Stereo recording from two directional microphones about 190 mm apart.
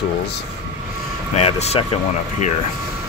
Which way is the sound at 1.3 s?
35° left (ahead or behind).